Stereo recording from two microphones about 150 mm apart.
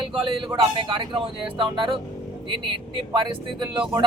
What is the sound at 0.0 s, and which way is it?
Speech, 35° right (ahead or behind).